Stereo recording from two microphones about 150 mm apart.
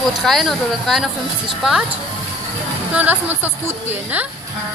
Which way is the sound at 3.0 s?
10° right (ahead or behind).